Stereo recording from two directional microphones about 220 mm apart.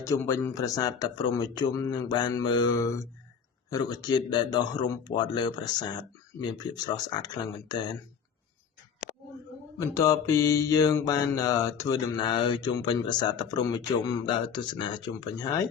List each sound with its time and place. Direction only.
0.0 s mantra: 15° left (ahead or behind)
3.7 s speech: 15° left (ahead or behind)
9.8 s mantra: 15° left (ahead or behind)